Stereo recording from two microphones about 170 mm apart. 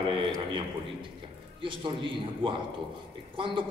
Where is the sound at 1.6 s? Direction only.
30° right (ahead or behind).